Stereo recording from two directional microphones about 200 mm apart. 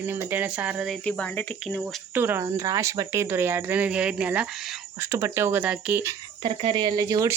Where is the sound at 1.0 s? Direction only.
5° left (ahead or behind).